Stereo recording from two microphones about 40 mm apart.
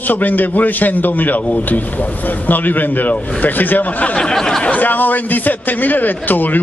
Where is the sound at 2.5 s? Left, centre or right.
Left.